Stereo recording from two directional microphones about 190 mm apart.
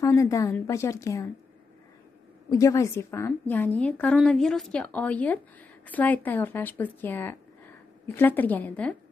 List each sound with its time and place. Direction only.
0.0 s a woman's voice: 15° left (ahead or behind)
2.5 s a woman's voice: 15° left (ahead or behind)